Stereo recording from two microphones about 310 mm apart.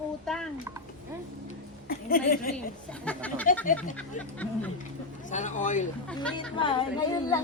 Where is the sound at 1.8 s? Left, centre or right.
Left.